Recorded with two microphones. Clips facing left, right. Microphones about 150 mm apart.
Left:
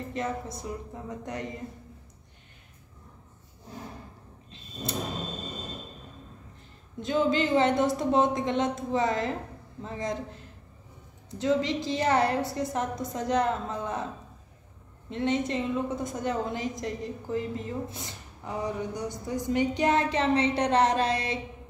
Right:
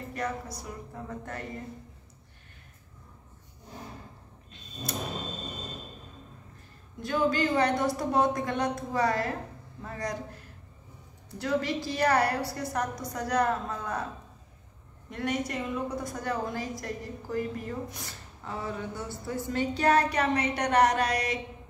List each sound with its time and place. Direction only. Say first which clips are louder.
0.1 s a woman's voice: left 1 dB; 25° left (ahead or behind)
7.0 s a woman's voice: left 2 dB; 20° left (ahead or behind)
15.0 s a woman's voice: left 4 dB; 25° left (ahead or behind)